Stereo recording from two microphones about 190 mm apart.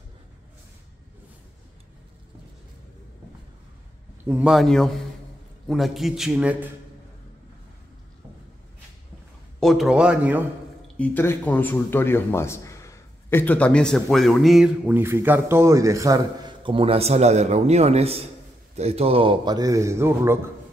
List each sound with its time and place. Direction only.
4.2 s a man's voice: 5° right (ahead or behind)
9.6 s a man's voice: centre (ahead or behind)
11.0 s a man's voice: 10° left (ahead or behind); by 20.3 s 15° right (ahead or behind)